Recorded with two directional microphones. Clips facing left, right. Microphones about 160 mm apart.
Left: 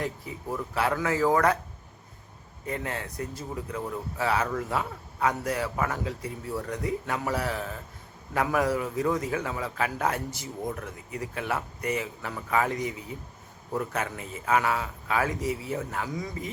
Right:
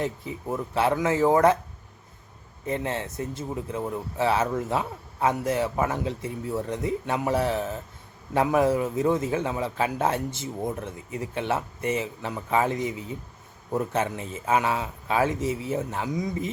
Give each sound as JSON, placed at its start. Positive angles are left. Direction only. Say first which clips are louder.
{"t": 0.0, "sound": "speech", "louder": "right 3 dB", "side_deg": -25}
{"t": 2.6, "sound": "speech", "louder": "right 4 dB", "side_deg": -25}